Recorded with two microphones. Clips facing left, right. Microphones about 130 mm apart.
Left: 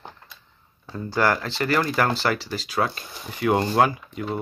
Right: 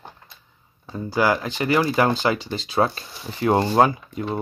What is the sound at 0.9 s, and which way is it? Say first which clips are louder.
Speech: right 2 dB; 10° right (ahead or behind).